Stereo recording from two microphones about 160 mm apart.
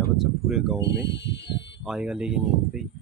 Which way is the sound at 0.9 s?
90° left.